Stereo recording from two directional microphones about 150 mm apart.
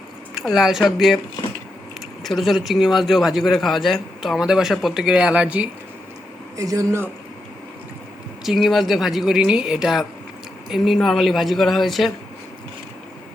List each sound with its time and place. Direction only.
0.3 s a man's voice: centre (ahead or behind)
2.2 s a man's voice: centre (ahead or behind)
6.6 s speech: 20° right (ahead or behind)
8.4 s a man's voice: centre (ahead or behind)